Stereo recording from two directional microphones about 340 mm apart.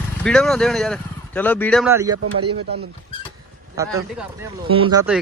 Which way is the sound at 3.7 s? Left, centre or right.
Centre.